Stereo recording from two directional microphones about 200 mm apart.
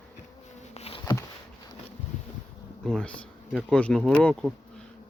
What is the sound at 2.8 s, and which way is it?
Speech, 5° left (ahead or behind).